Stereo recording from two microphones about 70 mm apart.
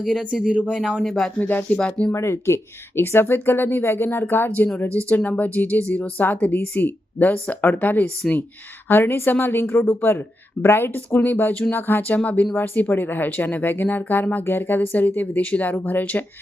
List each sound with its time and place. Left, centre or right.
0.0 s speech: centre
0.7 s speech: centre
1.4 s speech: left
2.1 s speech: left
8.2 s speech: centre
8.9 s a woman's voice: left